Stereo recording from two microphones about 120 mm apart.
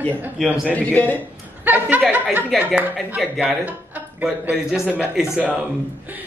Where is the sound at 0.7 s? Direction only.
10° left (ahead or behind).